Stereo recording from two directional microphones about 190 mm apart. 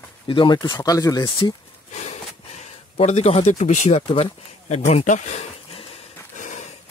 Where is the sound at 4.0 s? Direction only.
30° left (ahead or behind).